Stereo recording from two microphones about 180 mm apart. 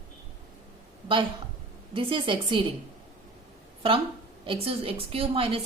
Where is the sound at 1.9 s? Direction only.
30° right (ahead or behind).